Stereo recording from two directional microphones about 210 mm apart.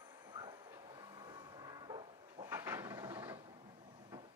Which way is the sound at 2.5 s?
10° right (ahead or behind).